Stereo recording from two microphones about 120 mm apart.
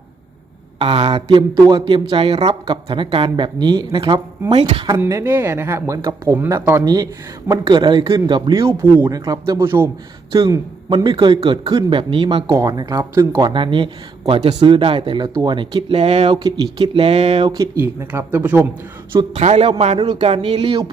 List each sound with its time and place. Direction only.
0.8 s speech: 50° right (ahead or behind)
4.5 s a man's voice: 60° right (ahead or behind)
5.0 s speech: 20° right (ahead or behind)
6.8 s speech: 30° right (ahead or behind)
7.6 s speech: 40° right (ahead or behind)
10.8 s speech: 40° right (ahead or behind)
12.5 s speech: 30° right (ahead or behind); by 16.3 s 60° right (ahead or behind)
16.3 s speech: 35° right (ahead or behind)
16.8 s speech: 50° right (ahead or behind)
17.6 s speech: 20° right (ahead or behind)
19.4 s a man's voice: 65° right (ahead or behind)
20.0 s speech: 50° right (ahead or behind)